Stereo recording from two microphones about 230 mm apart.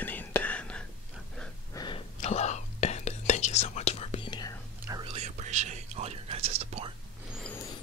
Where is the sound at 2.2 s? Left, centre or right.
Left.